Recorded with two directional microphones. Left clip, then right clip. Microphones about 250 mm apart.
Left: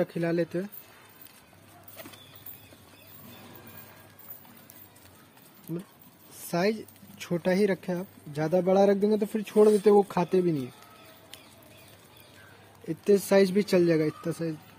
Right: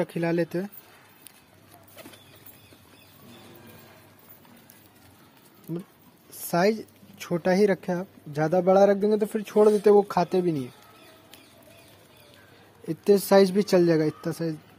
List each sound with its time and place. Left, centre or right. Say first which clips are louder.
0.0 s speech: right 2 dB; right
6.4 s speech: right 5 dB; right
9.6 s speech: right 1 dB; centre
9.8 s speech: right 3 dB; centre
12.8 s speech: right 3 dB; right